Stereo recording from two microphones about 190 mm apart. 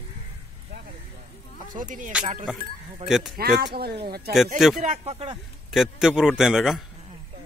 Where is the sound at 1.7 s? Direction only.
45° right (ahead or behind).